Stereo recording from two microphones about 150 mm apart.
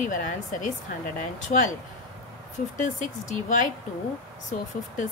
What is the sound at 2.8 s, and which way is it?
Speech, 60° left (ahead or behind).